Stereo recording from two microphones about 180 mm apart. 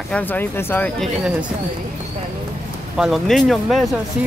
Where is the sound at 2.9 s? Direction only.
Centre (ahead or behind).